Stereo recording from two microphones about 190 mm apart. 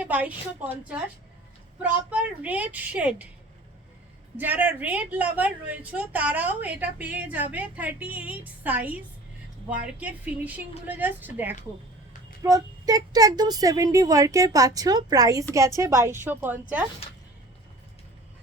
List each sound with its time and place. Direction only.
0.1 s a woman's voice: 10° right (ahead or behind)
1.8 s a woman's voice: 5° right (ahead or behind)
4.4 s a woman's voice: 10° right (ahead or behind)
10.0 s a woman's voice: 10° right (ahead or behind)